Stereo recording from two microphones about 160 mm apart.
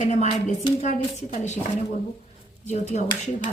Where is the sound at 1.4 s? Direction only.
45° left (ahead or behind).